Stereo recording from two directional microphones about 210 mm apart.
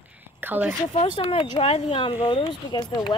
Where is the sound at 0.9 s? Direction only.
25° left (ahead or behind).